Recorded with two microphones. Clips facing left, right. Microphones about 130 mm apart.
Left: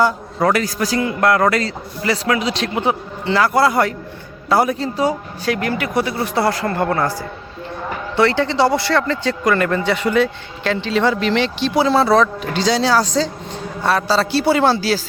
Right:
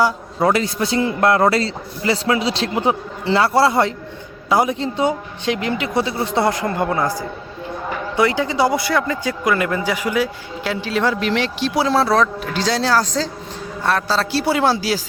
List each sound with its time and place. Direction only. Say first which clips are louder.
0.4 s a man's voice: even; 25° right (ahead or behind)